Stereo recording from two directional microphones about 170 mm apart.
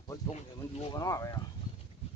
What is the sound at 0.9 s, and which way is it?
Speech, 20° left (ahead or behind).